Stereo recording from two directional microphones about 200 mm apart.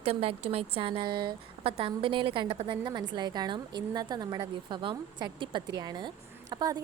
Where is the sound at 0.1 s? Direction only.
30° right (ahead or behind).